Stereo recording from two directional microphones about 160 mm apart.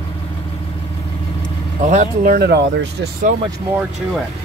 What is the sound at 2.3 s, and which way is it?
Speech, 90° right.